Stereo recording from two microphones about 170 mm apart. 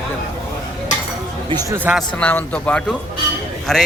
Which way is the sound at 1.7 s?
10° right (ahead or behind).